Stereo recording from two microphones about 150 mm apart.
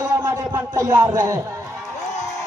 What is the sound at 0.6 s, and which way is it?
Speech, 20° right (ahead or behind).